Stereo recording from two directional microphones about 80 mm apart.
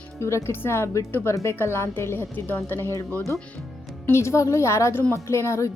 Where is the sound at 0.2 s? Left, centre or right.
Left.